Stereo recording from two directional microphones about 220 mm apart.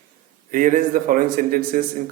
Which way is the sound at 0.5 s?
40° right (ahead or behind).